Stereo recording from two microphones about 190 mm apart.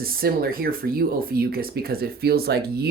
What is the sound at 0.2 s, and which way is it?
Speech, 50° right (ahead or behind).